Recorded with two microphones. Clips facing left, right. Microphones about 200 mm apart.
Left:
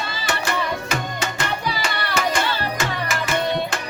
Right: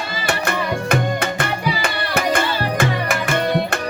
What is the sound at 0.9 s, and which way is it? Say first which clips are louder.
Music: right 6 dB; 55° right (ahead or behind).